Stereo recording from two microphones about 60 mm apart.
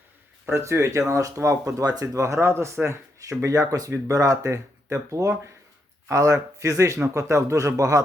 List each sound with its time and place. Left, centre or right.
0.5 s speech: right
2.2 s speech: right
3.2 s a man's voice: right